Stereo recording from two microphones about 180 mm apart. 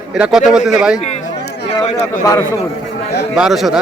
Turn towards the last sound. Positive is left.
turn(degrees=0)  # may be behind; listen again after turning